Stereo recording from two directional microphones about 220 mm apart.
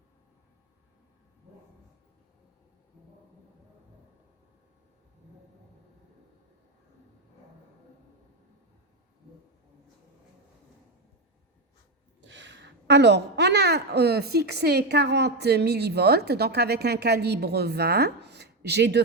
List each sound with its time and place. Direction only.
12.2 s speech: 55° right (ahead or behind)